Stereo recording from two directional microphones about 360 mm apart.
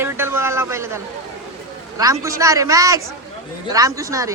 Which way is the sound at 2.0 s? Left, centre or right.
Centre.